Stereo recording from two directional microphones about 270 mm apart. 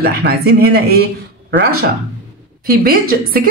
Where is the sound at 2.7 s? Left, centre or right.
Right.